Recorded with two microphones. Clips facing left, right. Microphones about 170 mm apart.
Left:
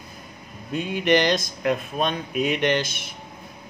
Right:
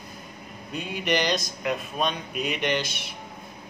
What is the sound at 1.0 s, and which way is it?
Speech, 50° left (ahead or behind).